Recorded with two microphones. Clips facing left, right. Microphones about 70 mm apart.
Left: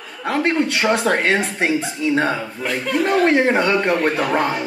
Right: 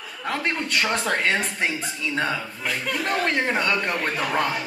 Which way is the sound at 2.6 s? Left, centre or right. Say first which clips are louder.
Left 8 dB; centre.